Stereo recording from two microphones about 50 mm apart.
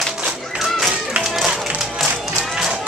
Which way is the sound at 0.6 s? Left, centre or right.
Centre.